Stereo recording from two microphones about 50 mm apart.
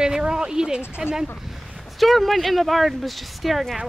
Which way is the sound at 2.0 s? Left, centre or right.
Centre.